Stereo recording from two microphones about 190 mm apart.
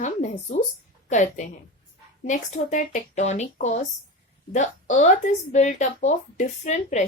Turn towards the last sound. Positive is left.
turn(degrees=40)  # may be behind; listen again after turning